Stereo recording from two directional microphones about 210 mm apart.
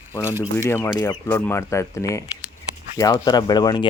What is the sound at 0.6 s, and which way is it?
Speech, 10° left (ahead or behind).